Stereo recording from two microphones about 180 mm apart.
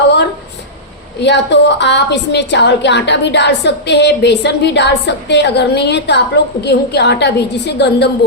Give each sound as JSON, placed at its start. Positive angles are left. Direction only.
{"t": 1.2, "sound": "a woman's voice", "side_deg": 75}